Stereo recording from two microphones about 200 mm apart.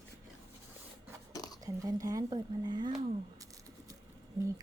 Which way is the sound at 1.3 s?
20° left (ahead or behind).